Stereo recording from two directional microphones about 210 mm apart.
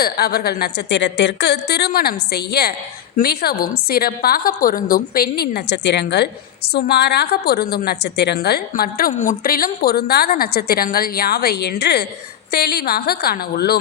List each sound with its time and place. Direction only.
0.0 s a woman's voice: 50° left (ahead or behind)